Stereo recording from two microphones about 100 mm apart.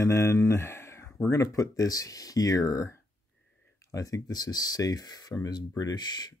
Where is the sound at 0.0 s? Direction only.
25° left (ahead or behind).